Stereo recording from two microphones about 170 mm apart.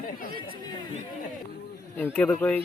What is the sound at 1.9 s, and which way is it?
Speech, 10° left (ahead or behind).